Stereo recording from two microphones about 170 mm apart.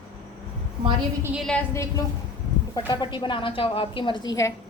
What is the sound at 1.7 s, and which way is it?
A woman's voice, 15° left (ahead or behind).